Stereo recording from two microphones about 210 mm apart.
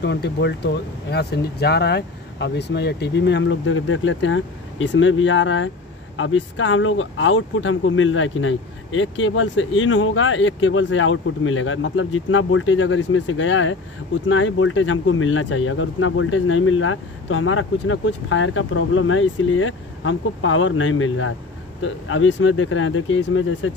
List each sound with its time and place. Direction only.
0.0 s speech: 55° left (ahead or behind)